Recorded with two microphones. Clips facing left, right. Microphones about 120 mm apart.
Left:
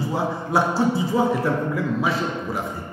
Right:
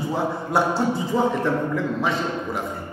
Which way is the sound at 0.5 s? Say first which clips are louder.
Left 1 dB; centre (ahead or behind).